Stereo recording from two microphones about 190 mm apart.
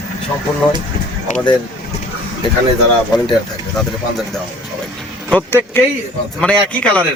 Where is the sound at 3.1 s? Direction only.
20° left (ahead or behind).